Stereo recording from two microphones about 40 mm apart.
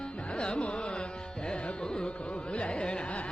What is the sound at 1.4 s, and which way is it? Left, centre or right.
Music, left.